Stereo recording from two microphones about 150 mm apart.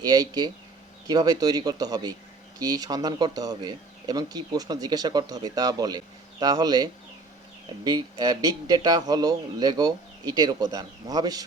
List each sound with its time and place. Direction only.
0.0 s speech: 25° right (ahead or behind)